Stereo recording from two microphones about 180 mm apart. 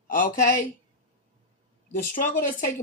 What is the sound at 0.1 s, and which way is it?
Speech, 50° left (ahead or behind).